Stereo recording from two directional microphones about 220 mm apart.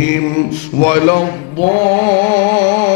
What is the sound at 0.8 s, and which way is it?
Speech, 15° left (ahead or behind).